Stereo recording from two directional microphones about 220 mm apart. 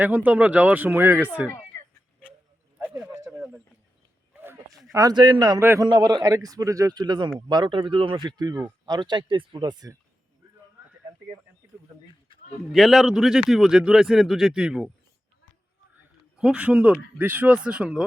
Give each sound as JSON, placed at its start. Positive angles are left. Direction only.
{"t": 0.0, "sound": "a man's voice", "side_deg": -10}
{"t": 2.7, "sound": "a sound", "side_deg": -5}
{"t": 4.9, "sound": "a man's voice", "side_deg": -15}
{"t": 12.7, "sound": "speech", "side_deg": 0}
{"t": 16.4, "sound": "speech", "side_deg": -5}